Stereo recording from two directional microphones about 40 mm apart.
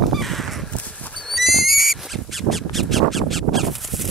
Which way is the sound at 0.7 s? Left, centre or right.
Left.